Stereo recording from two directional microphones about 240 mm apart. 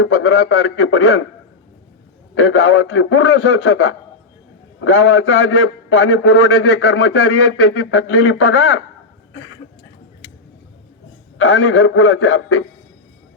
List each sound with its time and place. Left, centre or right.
0.0 s a man's voice: left
2.3 s a man's voice: left
11.3 s a man's voice: left